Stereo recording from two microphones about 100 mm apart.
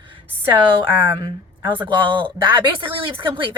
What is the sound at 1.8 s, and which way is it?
Speech, 55° right (ahead or behind).